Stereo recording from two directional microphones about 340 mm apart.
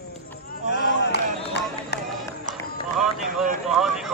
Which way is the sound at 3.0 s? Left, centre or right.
Centre.